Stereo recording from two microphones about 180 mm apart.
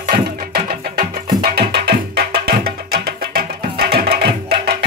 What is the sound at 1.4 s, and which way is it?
Music, 65° right (ahead or behind).